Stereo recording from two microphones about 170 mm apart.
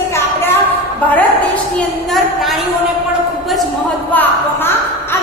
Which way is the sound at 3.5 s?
Centre (ahead or behind).